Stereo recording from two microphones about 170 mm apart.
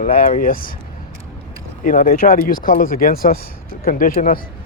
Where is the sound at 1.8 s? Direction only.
50° left (ahead or behind).